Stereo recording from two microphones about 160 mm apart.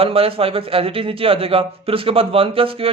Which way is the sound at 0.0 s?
35° right (ahead or behind).